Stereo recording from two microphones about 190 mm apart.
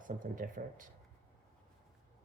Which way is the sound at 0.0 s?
45° right (ahead or behind).